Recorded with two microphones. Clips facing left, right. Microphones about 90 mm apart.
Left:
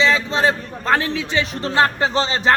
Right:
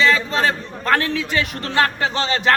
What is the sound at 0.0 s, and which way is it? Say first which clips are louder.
A man's voice: even; 25° left (ahead or behind).